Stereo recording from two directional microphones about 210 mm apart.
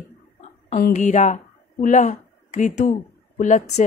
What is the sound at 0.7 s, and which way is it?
A woman's voice, 40° left (ahead or behind).